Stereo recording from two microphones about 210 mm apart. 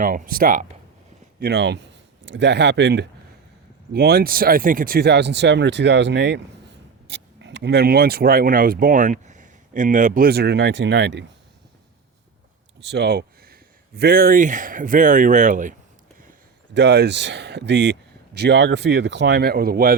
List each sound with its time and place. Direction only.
0.0 s speech: 40° right (ahead or behind)
1.4 s speech: 50° right (ahead or behind)
12.8 s speech: 50° right (ahead or behind)
16.7 s speech: 55° right (ahead or behind)